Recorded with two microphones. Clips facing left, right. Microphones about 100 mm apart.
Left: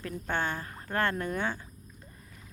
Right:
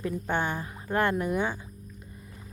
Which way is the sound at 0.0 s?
15° right (ahead or behind).